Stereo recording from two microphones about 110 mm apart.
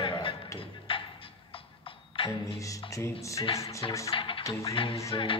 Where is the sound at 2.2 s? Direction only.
55° left (ahead or behind).